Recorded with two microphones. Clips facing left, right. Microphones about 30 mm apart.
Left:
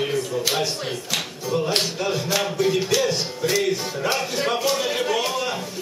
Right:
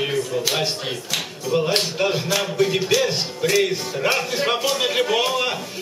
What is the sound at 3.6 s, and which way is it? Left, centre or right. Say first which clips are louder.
Music: right 2 dB; right.